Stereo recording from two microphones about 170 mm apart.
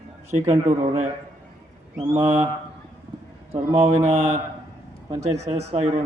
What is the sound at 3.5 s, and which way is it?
A man's voice, 35° right (ahead or behind).